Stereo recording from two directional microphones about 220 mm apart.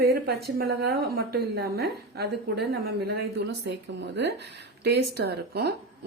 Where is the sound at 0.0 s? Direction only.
45° right (ahead or behind).